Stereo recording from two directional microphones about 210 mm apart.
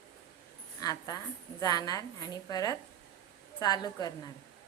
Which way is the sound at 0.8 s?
15° left (ahead or behind).